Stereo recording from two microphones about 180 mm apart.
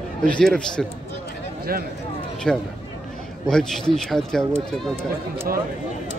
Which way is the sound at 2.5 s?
5° left (ahead or behind).